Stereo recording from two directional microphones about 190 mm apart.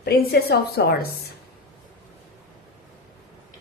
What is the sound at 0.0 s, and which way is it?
Speech, 55° left (ahead or behind).